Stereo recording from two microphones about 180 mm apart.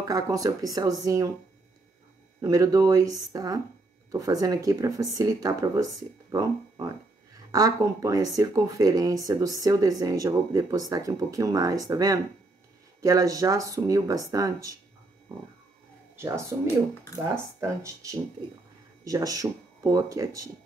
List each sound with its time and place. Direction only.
0.0 s speech: 20° right (ahead or behind)
2.4 s speech: 20° right (ahead or behind)
16.2 s speech: 15° right (ahead or behind)